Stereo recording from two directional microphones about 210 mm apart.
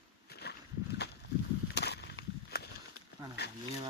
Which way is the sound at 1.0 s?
50° left (ahead or behind).